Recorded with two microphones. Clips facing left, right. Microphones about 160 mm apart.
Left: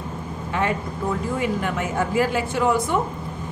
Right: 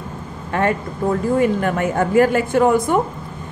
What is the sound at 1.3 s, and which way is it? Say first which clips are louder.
A woman's voice: right 7 dB; 50° right (ahead or behind).